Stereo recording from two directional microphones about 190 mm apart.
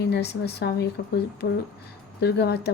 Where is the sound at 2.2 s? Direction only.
60° left (ahead or behind).